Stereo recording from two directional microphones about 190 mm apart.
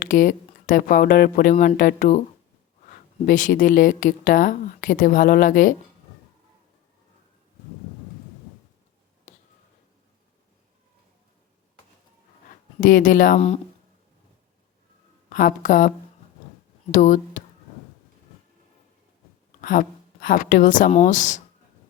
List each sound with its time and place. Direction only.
0.0 s speech: 45° left (ahead or behind)
9.3 s a sound: 40° left (ahead or behind)
12.5 s speech: 45° left (ahead or behind)
15.3 s speech: 45° left (ahead or behind)
16.9 s speech: 40° left (ahead or behind)
19.6 s speech: 45° left (ahead or behind)